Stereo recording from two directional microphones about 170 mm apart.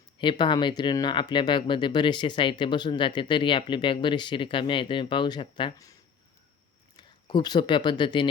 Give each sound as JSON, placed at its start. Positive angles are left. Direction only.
{"t": 0.2, "sound": "speech", "side_deg": 30}